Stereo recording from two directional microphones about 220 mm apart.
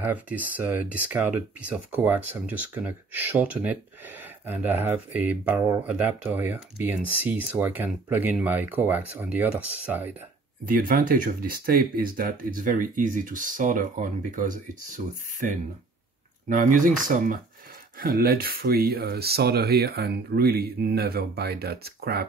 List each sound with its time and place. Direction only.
0.0 s speech: 5° right (ahead or behind)
10.6 s speech: 40° right (ahead or behind)
16.4 s speech: 35° right (ahead or behind)